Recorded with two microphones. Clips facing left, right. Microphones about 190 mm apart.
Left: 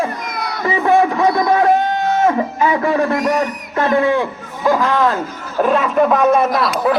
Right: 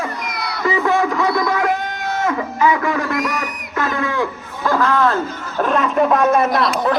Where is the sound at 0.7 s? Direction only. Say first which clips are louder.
Left 3 dB; 25° left (ahead or behind).